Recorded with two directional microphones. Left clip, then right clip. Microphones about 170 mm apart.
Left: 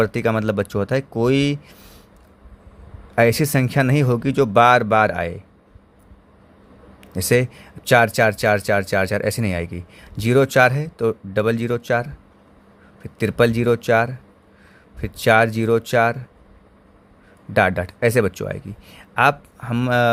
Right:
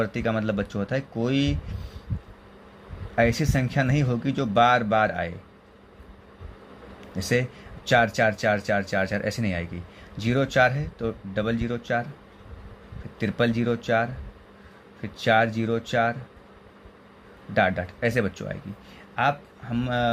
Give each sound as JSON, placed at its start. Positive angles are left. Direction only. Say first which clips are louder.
{"t": 0.0, "sound": "speech", "louder": "left 7 dB", "side_deg": 55}
{"t": 3.2, "sound": "speech", "louder": "left 6 dB", "side_deg": 55}
{"t": 7.2, "sound": "speech", "louder": "left 7 dB", "side_deg": 55}
{"t": 13.1, "sound": "speech", "louder": "left 7 dB", "side_deg": 55}
{"t": 17.5, "sound": "speech", "louder": "left 5 dB", "side_deg": 55}